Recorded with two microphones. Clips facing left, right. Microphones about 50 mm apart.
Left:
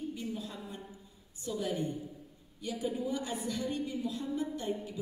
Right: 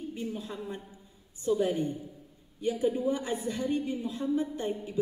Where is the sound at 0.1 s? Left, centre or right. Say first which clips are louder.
Right 3 dB; right.